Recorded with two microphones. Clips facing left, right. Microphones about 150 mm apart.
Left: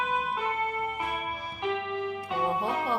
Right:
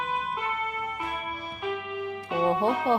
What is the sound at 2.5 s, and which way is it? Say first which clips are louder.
Music: right 7 dB; 25° right (ahead or behind).